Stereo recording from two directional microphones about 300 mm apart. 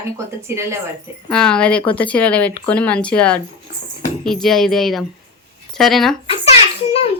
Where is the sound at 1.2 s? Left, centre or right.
Centre.